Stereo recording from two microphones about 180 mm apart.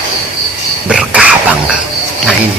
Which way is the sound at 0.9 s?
5° right (ahead or behind).